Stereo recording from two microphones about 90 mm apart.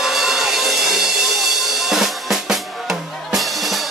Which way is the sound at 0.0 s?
5° right (ahead or behind).